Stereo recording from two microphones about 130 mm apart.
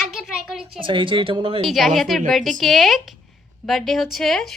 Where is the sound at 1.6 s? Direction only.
Centre (ahead or behind).